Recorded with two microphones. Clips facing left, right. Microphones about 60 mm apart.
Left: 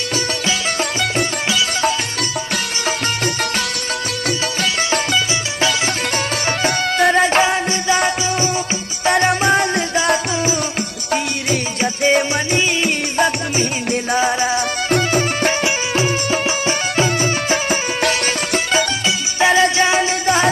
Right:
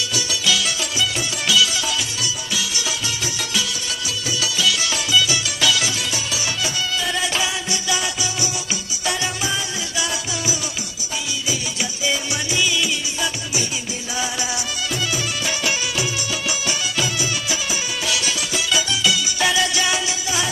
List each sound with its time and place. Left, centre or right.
1.5 s music: left
4.6 s music: left
9.1 s music: left
11.8 s music: left
15.6 s music: left
19.0 s music: left